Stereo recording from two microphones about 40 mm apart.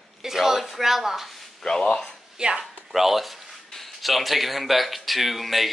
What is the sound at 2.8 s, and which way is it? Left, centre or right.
Speech, centre.